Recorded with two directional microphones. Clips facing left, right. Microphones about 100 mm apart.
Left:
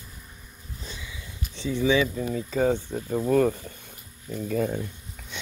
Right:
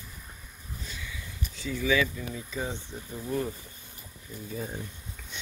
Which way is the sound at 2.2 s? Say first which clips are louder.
Left 10 dB; 40° left (ahead or behind).